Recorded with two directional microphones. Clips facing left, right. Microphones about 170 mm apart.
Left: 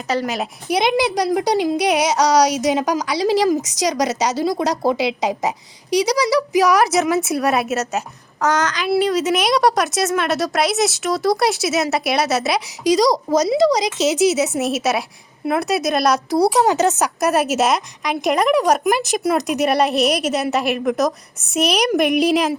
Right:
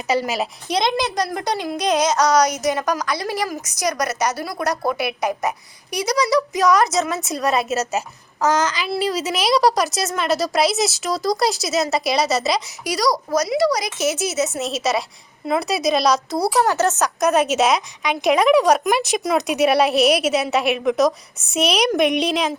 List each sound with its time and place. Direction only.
0.1 s a woman's voice: 5° right (ahead or behind)
0.7 s speech: 10° left (ahead or behind)
3.2 s speech: 90° left
3.8 s a woman's voice: 15° left (ahead or behind)
13.0 s speech: 25° left (ahead or behind); by 22.5 s 5° left (ahead or behind)